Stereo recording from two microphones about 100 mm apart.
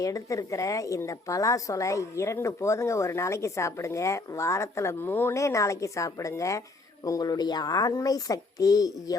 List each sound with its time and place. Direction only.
0.0 s a woman's voice: 35° left (ahead or behind)